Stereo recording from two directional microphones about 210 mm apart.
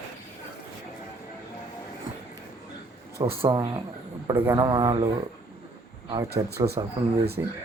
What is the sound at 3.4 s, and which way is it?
Speech, 20° right (ahead or behind).